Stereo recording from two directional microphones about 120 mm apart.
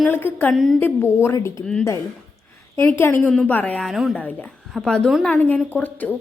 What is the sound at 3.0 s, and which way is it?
Speech, 15° left (ahead or behind).